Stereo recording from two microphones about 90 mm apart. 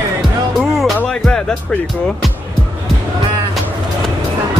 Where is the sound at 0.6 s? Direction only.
Centre (ahead or behind).